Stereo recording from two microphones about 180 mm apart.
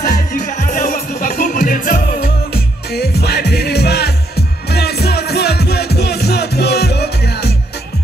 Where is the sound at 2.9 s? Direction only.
65° left (ahead or behind).